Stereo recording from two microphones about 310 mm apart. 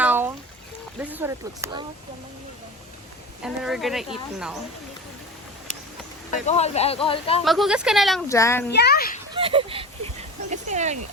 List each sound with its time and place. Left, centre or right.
0.0 s a sound: centre
0.9 s speech: centre
3.4 s speech: centre
6.4 s speech: left
7.4 s speech: centre
8.7 s a child's voice: left
9.3 s speech: centre